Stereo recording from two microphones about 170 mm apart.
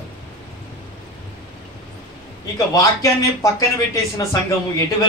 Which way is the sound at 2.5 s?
20° left (ahead or behind).